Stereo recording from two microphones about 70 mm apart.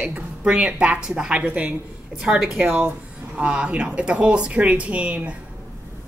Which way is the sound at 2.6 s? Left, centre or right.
Right.